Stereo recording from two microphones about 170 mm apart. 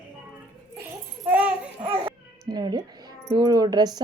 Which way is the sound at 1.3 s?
10° right (ahead or behind).